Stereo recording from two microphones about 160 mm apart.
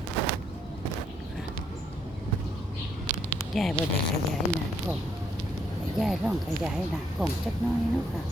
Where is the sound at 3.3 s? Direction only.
5° left (ahead or behind).